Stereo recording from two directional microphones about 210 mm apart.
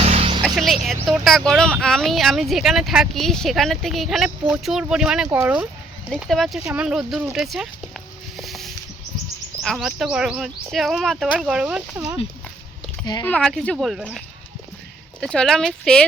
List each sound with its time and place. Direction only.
0.0 s music: 30° right (ahead or behind)
0.4 s music: centre (ahead or behind)
0.9 s speech: centre (ahead or behind)
8.4 s a sound: centre (ahead or behind)
9.6 s speech: centre (ahead or behind)
13.2 s speech: 5° left (ahead or behind)
15.2 s speech: 5° left (ahead or behind)